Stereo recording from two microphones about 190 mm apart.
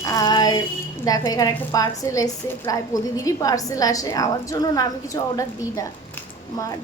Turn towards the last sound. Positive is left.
turn(degrees=15)  # may be behind; listen again after turning